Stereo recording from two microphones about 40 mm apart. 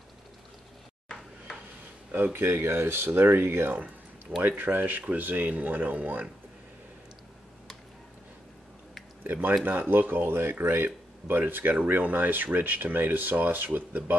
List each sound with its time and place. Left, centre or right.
2.3 s speech: right
3.2 s speech: right
4.4 s speech: right
9.2 s speech: right
11.7 s speech: right